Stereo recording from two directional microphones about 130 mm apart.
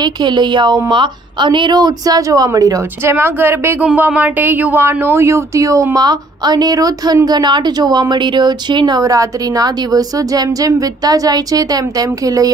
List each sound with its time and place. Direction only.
0.0 s a woman's voice: 35° right (ahead or behind)